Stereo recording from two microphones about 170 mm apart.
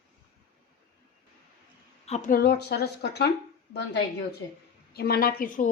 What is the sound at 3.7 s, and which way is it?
Speech, 90° left.